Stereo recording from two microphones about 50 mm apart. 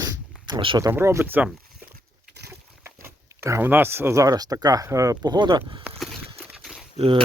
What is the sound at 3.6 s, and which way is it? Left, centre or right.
Speech, right.